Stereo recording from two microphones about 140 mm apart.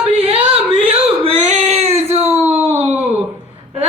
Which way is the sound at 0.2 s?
45° right (ahead or behind).